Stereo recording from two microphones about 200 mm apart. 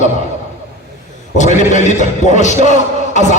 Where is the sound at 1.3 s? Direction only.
35° left (ahead or behind).